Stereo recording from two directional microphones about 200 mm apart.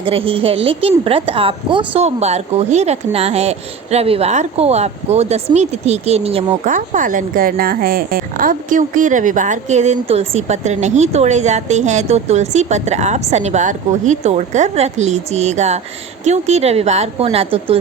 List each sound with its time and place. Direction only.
0.0 s a woman's voice: 25° right (ahead or behind)